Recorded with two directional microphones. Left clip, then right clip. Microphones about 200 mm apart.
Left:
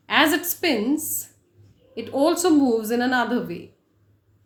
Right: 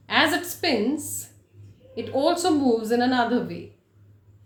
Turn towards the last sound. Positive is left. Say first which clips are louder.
# even
turn(degrees=40)  # may be behind; listen again after turning